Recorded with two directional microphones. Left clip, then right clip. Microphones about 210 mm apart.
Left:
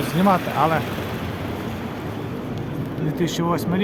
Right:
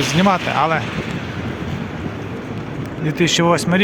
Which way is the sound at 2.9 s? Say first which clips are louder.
Right 8 dB; 25° right (ahead or behind).